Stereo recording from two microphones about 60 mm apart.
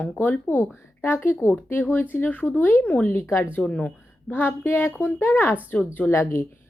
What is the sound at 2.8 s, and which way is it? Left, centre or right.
Speech, centre.